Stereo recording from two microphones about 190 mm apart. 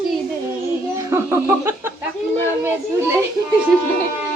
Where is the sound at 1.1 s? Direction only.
15° right (ahead or behind).